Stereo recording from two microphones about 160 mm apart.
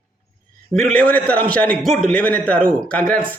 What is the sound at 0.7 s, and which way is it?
A man's voice, 5° left (ahead or behind).